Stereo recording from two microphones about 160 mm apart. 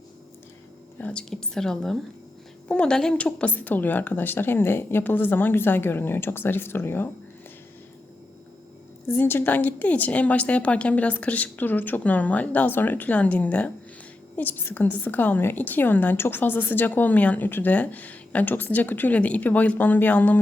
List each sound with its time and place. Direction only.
0.9 s a woman's voice: 10° left (ahead or behind)
9.0 s a woman's voice: 15° left (ahead or behind)